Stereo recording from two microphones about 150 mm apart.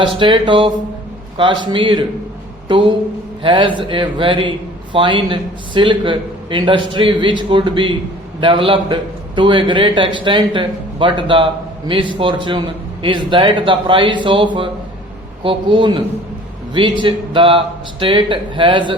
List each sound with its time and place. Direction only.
0.2 s a man's voice: 35° right (ahead or behind)